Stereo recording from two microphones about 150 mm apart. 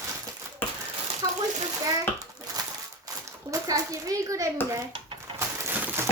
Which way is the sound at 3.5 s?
20° right (ahead or behind).